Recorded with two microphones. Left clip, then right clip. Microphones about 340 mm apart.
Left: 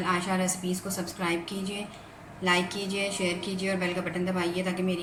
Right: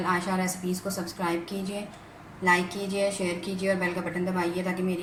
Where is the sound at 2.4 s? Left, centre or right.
Centre.